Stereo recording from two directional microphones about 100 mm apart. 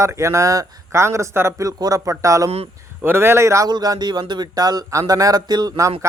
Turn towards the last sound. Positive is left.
turn(degrees=-40)  # may be behind; listen again after turning